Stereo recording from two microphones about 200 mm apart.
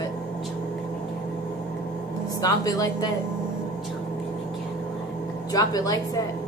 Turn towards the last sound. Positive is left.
turn(degrees=20)  # may be behind; listen again after turning